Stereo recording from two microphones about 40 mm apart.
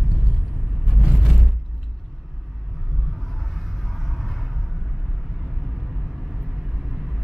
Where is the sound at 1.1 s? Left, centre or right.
Centre.